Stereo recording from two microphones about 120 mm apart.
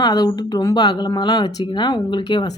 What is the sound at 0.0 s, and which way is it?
Speech, 35° left (ahead or behind).